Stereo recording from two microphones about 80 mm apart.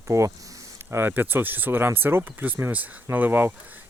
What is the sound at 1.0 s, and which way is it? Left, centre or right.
Speech, right.